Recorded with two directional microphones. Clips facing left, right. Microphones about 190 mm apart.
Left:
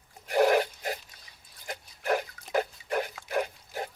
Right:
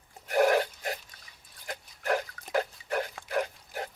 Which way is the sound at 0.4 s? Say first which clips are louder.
Left 2 dB; 15° left (ahead or behind).